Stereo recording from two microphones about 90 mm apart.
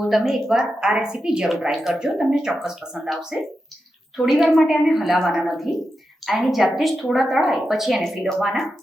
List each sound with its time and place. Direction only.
0.1 s a woman's voice: centre (ahead or behind)